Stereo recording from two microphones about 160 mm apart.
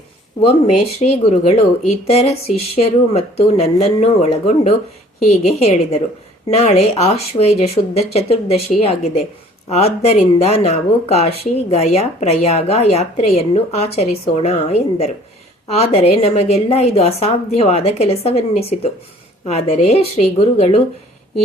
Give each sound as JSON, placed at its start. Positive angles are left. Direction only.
{"t": 0.9, "sound": "speech", "side_deg": 40}